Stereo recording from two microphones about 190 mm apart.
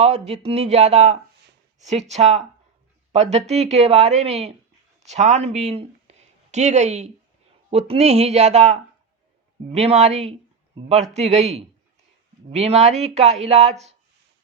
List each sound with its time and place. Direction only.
0.0 s speech: 35° right (ahead or behind)